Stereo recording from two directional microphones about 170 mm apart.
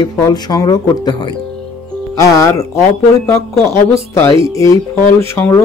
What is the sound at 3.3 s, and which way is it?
Speech, 15° left (ahead or behind).